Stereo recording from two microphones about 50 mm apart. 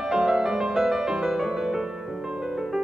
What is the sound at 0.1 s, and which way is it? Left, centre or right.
Music, centre.